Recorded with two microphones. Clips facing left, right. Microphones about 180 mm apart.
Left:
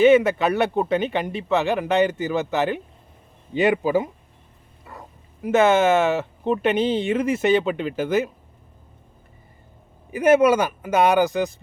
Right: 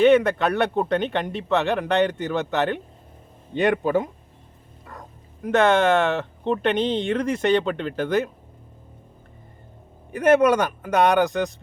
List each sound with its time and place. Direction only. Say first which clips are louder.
0.0 s speech: left 1 dB; 5° left (ahead or behind)
10.1 s speech: left 1 dB; 5° left (ahead or behind)